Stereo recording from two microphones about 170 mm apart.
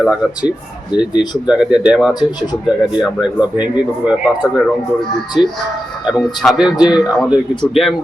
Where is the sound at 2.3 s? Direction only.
25° left (ahead or behind).